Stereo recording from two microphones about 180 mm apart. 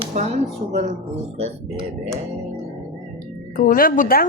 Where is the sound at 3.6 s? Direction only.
50° left (ahead or behind).